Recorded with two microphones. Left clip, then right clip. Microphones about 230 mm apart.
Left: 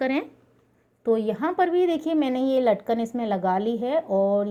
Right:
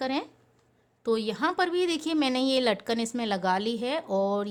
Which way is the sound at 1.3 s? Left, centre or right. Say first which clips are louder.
Left 4 dB; centre.